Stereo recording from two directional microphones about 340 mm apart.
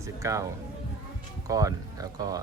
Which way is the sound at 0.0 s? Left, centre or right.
Centre.